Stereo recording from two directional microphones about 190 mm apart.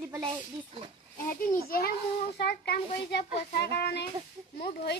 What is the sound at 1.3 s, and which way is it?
A child's voice, 45° left (ahead or behind).